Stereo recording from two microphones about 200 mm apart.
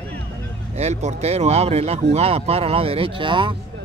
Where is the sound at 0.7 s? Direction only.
35° right (ahead or behind).